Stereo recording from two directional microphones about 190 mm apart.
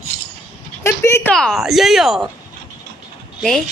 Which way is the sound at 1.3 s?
Centre (ahead or behind).